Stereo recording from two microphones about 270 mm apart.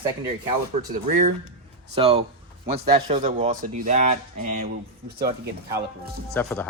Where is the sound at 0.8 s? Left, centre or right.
Right.